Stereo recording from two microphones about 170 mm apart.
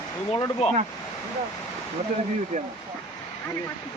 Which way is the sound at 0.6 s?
35° left (ahead or behind).